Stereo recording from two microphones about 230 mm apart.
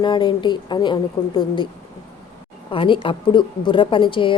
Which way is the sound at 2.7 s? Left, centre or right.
Left.